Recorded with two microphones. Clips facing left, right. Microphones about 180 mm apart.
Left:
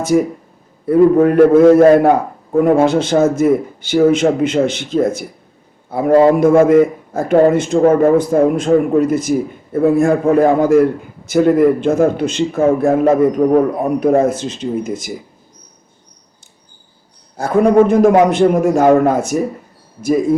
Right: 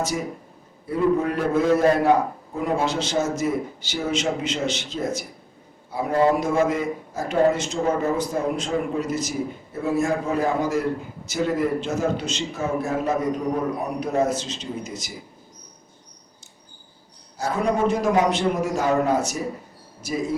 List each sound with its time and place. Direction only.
0.0 s a man's voice: 55° left (ahead or behind)
6.1 s a man's voice: 90° left
6.3 s a man's voice: 55° left (ahead or behind)
17.3 s a man's voice: 55° left (ahead or behind)